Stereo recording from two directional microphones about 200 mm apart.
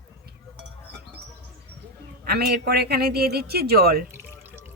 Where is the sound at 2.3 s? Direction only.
50° right (ahead or behind).